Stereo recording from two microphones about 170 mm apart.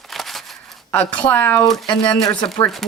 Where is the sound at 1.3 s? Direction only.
10° left (ahead or behind).